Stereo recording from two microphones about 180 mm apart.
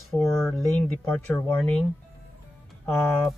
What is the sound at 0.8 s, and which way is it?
Speech, 5° left (ahead or behind).